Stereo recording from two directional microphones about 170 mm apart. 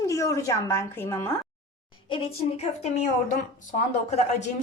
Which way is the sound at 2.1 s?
35° left (ahead or behind).